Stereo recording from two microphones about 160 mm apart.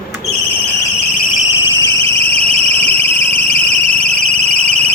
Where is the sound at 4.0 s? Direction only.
40° right (ahead or behind).